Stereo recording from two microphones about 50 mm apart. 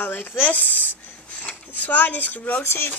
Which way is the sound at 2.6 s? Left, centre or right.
Left.